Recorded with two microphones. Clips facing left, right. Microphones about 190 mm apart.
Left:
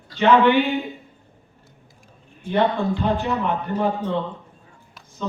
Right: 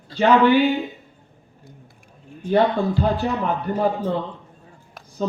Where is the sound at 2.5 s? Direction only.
40° right (ahead or behind).